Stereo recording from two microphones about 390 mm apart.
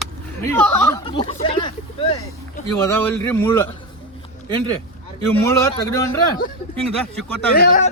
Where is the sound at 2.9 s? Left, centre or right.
Centre.